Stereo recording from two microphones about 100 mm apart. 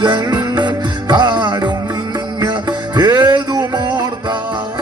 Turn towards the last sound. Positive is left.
turn(degrees=-45)  # may be behind; listen again after turning